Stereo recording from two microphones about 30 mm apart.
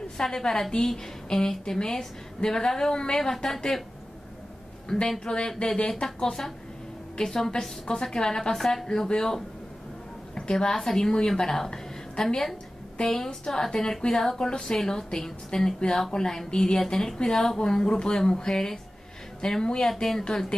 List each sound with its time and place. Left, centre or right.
0.3 s a woman's voice: left
4.9 s a woman's voice: centre
5.2 s a woman's voice: left
7.2 s a woman's voice: centre
8.5 s a woman's voice: centre
8.8 s speech: left
10.3 s a woman's voice: left
10.7 s a woman's voice: centre
11.7 s a sound: left
13.0 s a woman's voice: centre
16.7 s a woman's voice: centre
19.9 s a woman's voice: centre
20.2 s speech: left